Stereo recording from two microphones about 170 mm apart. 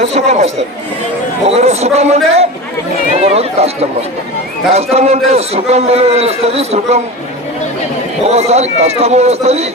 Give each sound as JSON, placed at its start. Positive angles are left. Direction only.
{"t": 0.0, "sound": "a man's voice", "side_deg": -40}
{"t": 8.3, "sound": "a man's voice", "side_deg": -40}